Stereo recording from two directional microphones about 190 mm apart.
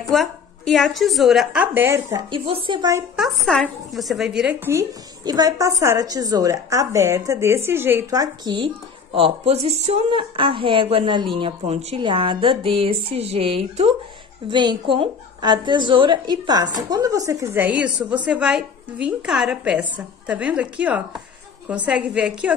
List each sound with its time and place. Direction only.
0.1 s a woman's voice: centre (ahead or behind); by 3.0 s 25° right (ahead or behind)
3.2 s a woman's voice: centre (ahead or behind)